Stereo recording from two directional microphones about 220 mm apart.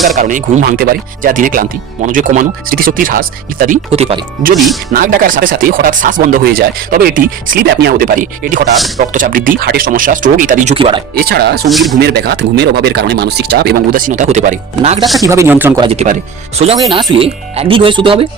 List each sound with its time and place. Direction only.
0.2 s speech: 35° right (ahead or behind)
3.9 s speech: 30° right (ahead or behind)
4.5 s speech: centre (ahead or behind)
4.9 s speech: 40° right (ahead or behind)
11.2 s speech: 45° right (ahead or behind)
11.7 s speech: centre (ahead or behind)
11.9 s speech: 45° right (ahead or behind)
15.2 s speech: 15° right (ahead or behind)
15.8 s speech: 30° right (ahead or behind)